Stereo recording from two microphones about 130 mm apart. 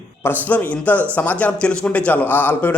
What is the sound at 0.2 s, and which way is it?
A man's voice, 15° left (ahead or behind).